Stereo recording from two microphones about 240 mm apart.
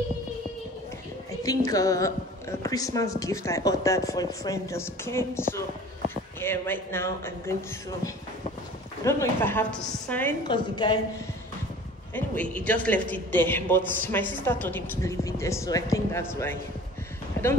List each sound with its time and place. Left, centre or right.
1.4 s a woman's voice: centre
9.0 s a woman's voice: centre
10.5 s speech: centre
12.1 s a woman's voice: centre